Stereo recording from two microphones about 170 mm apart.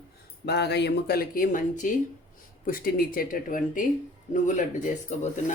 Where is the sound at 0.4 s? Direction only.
75° left (ahead or behind); by 3.8 s 55° left (ahead or behind).